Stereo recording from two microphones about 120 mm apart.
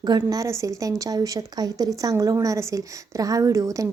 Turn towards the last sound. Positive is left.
turn(degrees=-25)  # may be behind; listen again after turning